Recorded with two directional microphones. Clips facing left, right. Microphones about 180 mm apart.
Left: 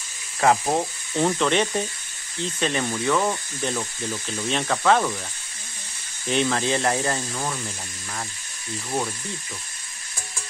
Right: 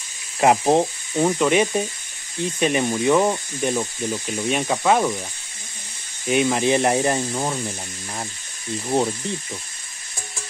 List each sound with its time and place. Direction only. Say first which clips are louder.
0.4 s speech: right 4 dB; 20° right (ahead or behind)
1.1 s speech: right 3 dB; 10° right (ahead or behind)
6.2 s speech: right 4 dB; 15° right (ahead or behind)
8.8 s speech: right 7 dB; 30° right (ahead or behind)